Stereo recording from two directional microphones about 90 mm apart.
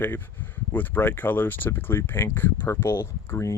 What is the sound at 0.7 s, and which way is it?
Speech, 20° left (ahead or behind).